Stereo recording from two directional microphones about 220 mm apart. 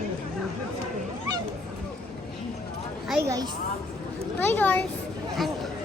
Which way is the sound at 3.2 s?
15° right (ahead or behind).